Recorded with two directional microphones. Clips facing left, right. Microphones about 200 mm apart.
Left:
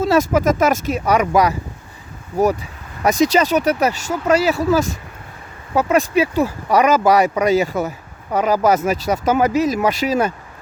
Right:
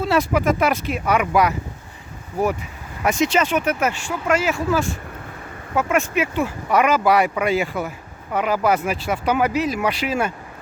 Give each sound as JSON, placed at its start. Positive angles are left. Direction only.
{"t": 0.0, "sound": "speech", "side_deg": 40}
{"t": 3.0, "sound": "speech", "side_deg": 40}